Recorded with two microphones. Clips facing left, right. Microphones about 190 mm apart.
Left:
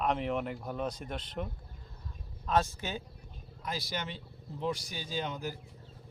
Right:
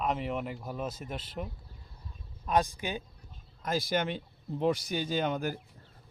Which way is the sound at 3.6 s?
50° right (ahead or behind).